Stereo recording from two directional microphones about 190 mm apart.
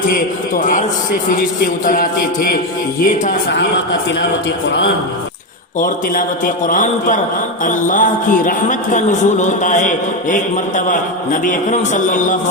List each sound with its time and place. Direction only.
0.1 s a man's voice: 45° left (ahead or behind)
5.8 s a man's voice: 45° left (ahead or behind)